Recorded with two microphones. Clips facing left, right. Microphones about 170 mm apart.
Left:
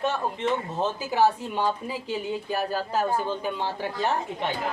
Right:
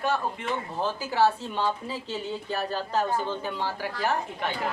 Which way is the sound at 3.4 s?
20° left (ahead or behind).